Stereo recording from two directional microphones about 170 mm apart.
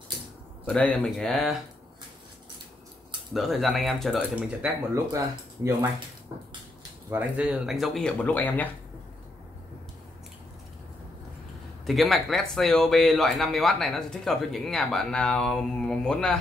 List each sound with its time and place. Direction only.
0.7 s speech: 5° left (ahead or behind)
3.3 s speech: centre (ahead or behind)
5.1 s speech: 20° right (ahead or behind)
7.1 s speech: 10° right (ahead or behind); by 8.6 s 10° left (ahead or behind)
11.8 s speech: centre (ahead or behind)